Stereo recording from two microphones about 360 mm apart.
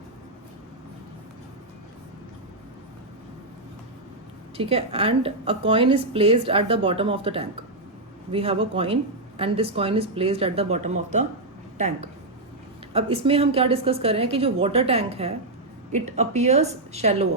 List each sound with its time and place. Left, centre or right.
4.5 s a woman's voice: centre
12.9 s a woman's voice: centre